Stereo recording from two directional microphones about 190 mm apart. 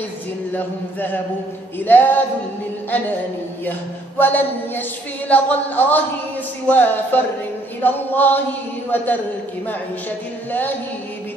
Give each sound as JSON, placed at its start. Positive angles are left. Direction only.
{"t": 0.5, "sound": "chant", "side_deg": 10}
{"t": 4.2, "sound": "chant", "side_deg": 10}